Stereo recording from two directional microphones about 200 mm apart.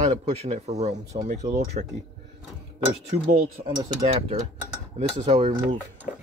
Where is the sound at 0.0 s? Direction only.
35° right (ahead or behind).